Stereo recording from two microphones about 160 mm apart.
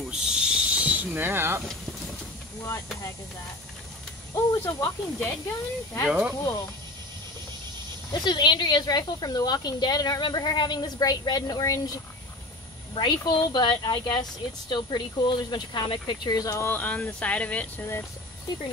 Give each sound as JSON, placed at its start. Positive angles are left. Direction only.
{"t": 0.1, "sound": "a sound", "side_deg": -5}
{"t": 4.4, "sound": "speech", "side_deg": 20}
{"t": 6.0, "sound": "speech", "side_deg": -5}
{"t": 8.1, "sound": "speech", "side_deg": 25}
{"t": 12.9, "sound": "speech", "side_deg": 30}